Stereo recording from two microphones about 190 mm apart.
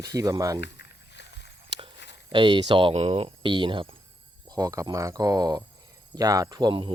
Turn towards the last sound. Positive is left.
turn(degrees=-25)  # may be behind; listen again after turning